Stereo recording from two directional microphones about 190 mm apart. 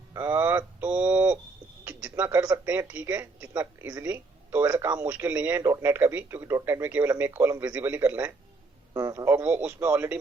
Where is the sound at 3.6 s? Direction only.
10° right (ahead or behind).